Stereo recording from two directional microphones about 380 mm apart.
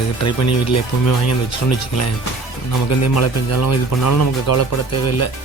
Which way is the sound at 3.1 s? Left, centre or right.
Left.